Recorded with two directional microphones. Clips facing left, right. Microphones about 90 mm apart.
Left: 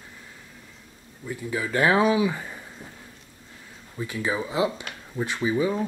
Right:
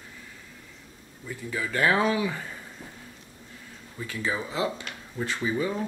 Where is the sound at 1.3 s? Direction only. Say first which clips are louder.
Left 3 dB; 20° left (ahead or behind).